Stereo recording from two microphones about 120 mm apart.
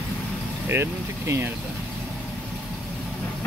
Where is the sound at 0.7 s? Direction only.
20° right (ahead or behind).